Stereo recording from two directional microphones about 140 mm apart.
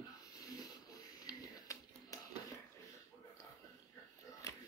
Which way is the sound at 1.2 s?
25° left (ahead or behind).